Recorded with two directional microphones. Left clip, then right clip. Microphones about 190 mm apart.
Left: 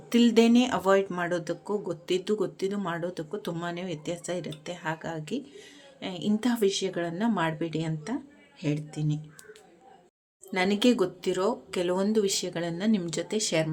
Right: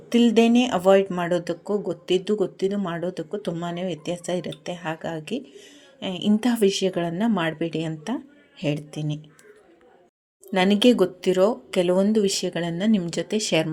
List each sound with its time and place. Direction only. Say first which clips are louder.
0.1 s speech: right 3 dB; 5° right (ahead or behind)
10.5 s speech: right 6 dB; 20° right (ahead or behind)